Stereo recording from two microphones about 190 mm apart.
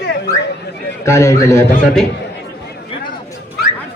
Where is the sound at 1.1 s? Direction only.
15° left (ahead or behind).